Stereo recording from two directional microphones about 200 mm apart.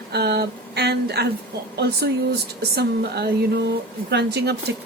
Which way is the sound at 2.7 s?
55° right (ahead or behind).